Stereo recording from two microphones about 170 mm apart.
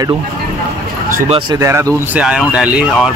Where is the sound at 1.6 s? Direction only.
15° right (ahead or behind).